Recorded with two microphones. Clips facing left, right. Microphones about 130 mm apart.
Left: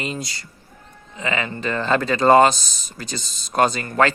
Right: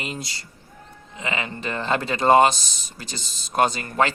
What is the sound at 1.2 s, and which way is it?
Speech, 20° right (ahead or behind).